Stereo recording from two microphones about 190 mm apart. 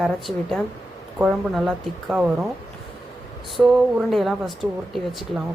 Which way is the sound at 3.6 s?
Centre (ahead or behind).